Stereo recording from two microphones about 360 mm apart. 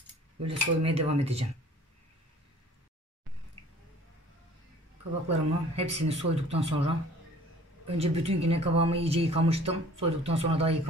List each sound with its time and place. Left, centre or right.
0.5 s speech: centre
5.3 s speech: centre
8.0 s speech: centre